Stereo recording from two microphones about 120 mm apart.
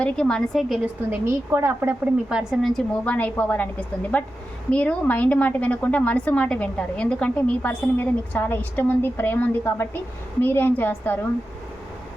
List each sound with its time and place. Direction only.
0.0 s a woman's voice: 5° left (ahead or behind)
1.1 s a woman's voice: 20° right (ahead or behind)
2.3 s a woman's voice: 5° right (ahead or behind); by 11.3 s 15° left (ahead or behind)